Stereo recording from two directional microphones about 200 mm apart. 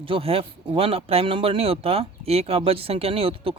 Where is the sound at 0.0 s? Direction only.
25° right (ahead or behind).